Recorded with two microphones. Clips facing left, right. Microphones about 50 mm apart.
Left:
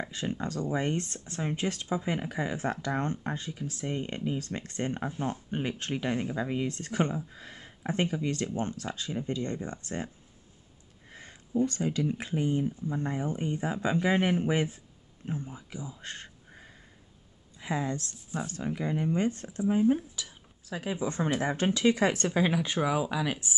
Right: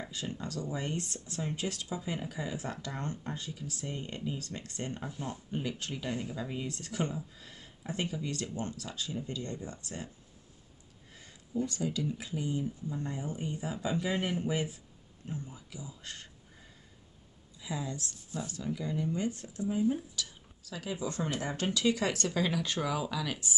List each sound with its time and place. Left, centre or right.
0.1 s speech: left
20.2 s speech: left